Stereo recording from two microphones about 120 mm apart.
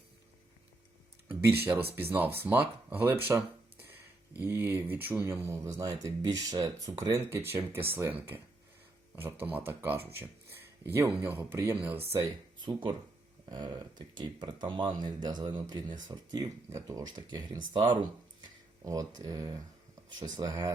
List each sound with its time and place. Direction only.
1.3 s speech: 15° right (ahead or behind); by 7.2 s 30° right (ahead or behind)
7.2 s speech: 20° right (ahead or behind)
13.5 s speech: 40° right (ahead or behind)
16.6 s speech: 25° right (ahead or behind)
18.9 s speech: 30° right (ahead or behind)